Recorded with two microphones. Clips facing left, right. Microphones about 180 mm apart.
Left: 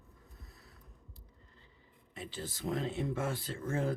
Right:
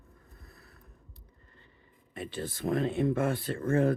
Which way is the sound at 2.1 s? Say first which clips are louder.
Right 6 dB; 60° right (ahead or behind).